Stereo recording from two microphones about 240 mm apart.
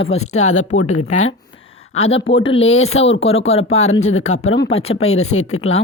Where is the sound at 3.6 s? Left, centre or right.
Left.